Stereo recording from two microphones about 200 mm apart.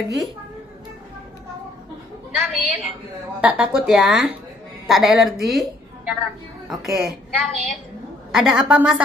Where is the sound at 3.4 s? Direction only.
5° right (ahead or behind).